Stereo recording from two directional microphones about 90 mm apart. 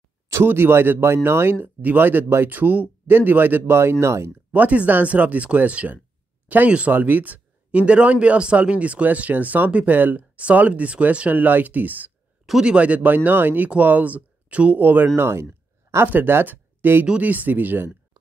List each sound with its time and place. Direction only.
0.3 s speech: 30° right (ahead or behind)
4.5 s speech: 15° right (ahead or behind)
12.4 s a man's voice: 5° right (ahead or behind)
12.7 s speech: 15° right (ahead or behind)